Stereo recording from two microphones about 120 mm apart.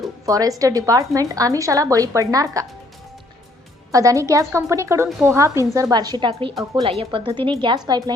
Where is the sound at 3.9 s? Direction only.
30° right (ahead or behind).